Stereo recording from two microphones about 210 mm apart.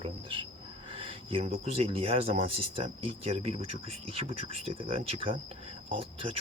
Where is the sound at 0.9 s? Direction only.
25° right (ahead or behind).